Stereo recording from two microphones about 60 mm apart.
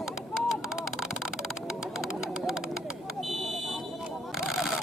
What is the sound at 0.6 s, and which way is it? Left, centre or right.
Bird, centre.